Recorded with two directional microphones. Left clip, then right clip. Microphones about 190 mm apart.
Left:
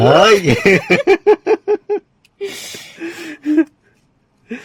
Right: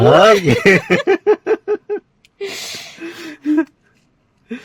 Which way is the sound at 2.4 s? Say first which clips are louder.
Even; 30° right (ahead or behind).